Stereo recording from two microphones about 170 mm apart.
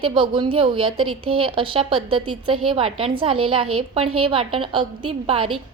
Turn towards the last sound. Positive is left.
turn(degrees=-30)  # may be behind; listen again after turning